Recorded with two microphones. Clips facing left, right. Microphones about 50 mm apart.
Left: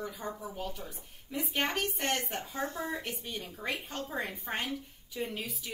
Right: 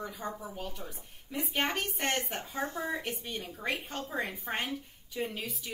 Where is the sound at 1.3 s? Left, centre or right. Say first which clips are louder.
Even; centre.